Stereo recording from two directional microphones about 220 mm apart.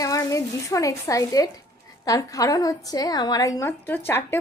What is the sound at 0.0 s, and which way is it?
A woman's voice, 15° left (ahead or behind).